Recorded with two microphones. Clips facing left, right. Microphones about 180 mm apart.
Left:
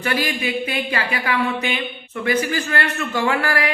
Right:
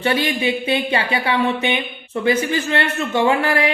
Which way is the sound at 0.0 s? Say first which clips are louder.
Right 4 dB; 25° right (ahead or behind).